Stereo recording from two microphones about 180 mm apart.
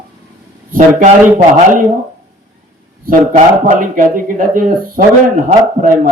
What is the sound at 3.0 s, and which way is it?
A man's voice, 45° right (ahead or behind).